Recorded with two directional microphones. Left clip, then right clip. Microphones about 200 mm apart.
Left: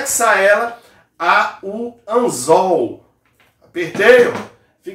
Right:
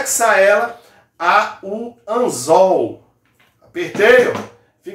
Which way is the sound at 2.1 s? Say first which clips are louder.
Left 2 dB; centre (ahead or behind).